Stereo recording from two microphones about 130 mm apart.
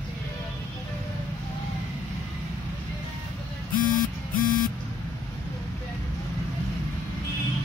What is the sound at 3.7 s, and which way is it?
Printer, 90° left.